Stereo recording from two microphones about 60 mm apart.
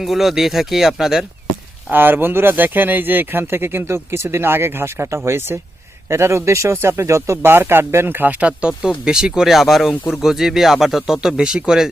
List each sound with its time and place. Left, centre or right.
0.0 s speech: centre
1.9 s speech: right
7.4 s speech: right
8.8 s speech: centre